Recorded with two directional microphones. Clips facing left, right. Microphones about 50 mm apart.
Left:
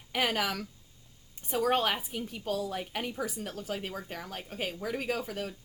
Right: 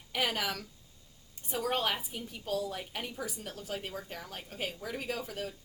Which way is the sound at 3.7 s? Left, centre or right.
Left.